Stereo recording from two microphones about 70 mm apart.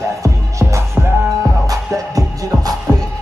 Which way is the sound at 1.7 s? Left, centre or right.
Right.